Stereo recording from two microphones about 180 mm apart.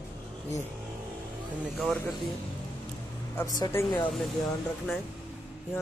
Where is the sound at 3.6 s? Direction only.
20° left (ahead or behind).